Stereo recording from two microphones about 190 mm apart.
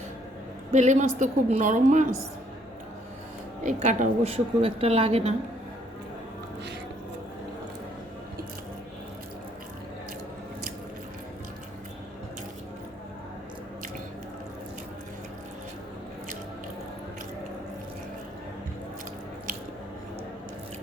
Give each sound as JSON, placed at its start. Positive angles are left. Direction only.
{"t": 0.7, "sound": "speech", "side_deg": -40}
{"t": 3.6, "sound": "speech", "side_deg": -40}